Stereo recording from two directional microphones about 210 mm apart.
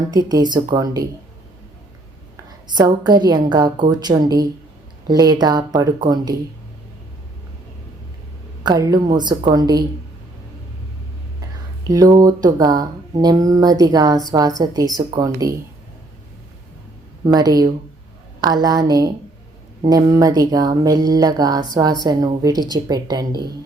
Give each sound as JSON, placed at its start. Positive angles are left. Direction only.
{"t": 0.1, "sound": "speech", "side_deg": -20}
{"t": 2.6, "sound": "a woman's voice", "side_deg": -20}
{"t": 8.6, "sound": "a woman's voice", "side_deg": -20}
{"t": 11.9, "sound": "speech", "side_deg": -15}
{"t": 17.2, "sound": "a woman's voice", "side_deg": -20}